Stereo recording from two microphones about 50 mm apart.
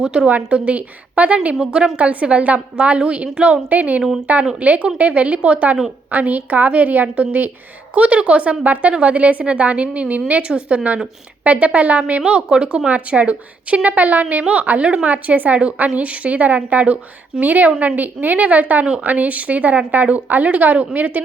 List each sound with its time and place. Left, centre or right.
0.0 s a woman's voice: centre
0.3 s a woman's voice: right
1.5 s a woman's voice: centre
2.0 s a woman's voice: right
10.4 s a woman's voice: right